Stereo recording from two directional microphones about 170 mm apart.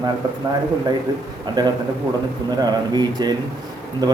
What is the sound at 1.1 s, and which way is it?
Speech, 20° right (ahead or behind).